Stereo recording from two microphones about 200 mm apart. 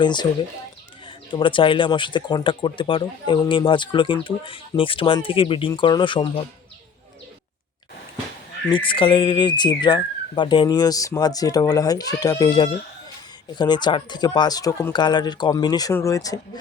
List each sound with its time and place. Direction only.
0.0 s speech: 20° left (ahead or behind)
8.7 s speech: 25° left (ahead or behind)